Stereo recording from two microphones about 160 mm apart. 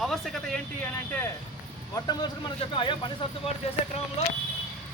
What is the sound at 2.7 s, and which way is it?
Speech, 30° left (ahead or behind).